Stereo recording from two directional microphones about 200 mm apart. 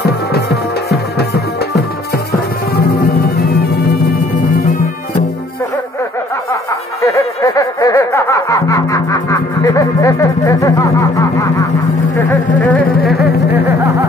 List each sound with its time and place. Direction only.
0.3 s music: 50° left (ahead or behind)
7.0 s music: 15° left (ahead or behind)
12.3 s a sound: 10° left (ahead or behind)